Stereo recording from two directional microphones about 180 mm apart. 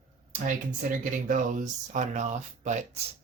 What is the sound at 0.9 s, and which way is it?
Speech, 45° right (ahead or behind).